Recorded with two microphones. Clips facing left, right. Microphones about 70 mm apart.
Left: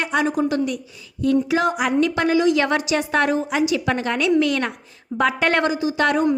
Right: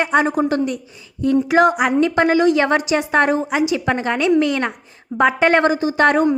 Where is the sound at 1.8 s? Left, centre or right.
Right.